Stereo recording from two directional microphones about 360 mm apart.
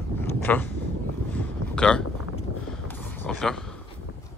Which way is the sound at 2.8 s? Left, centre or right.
Centre.